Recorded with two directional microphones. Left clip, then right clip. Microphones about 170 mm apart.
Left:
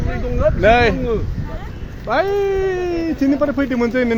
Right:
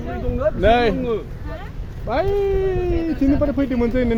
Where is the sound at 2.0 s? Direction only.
10° left (ahead or behind).